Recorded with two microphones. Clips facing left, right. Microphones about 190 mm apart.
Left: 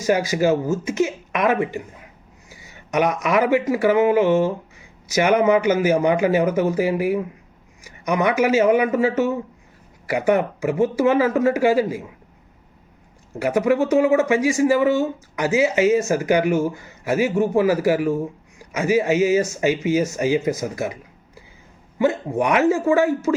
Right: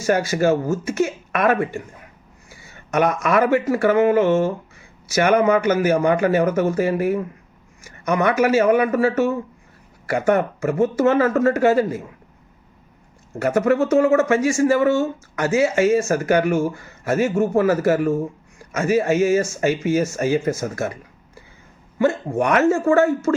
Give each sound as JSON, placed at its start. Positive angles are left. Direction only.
{"t": 0.0, "sound": "speech", "side_deg": 10}
{"t": 2.9, "sound": "speech", "side_deg": 15}
{"t": 13.4, "sound": "speech", "side_deg": 10}